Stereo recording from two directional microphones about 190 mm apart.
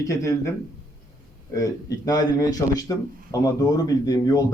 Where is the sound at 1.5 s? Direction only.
20° left (ahead or behind).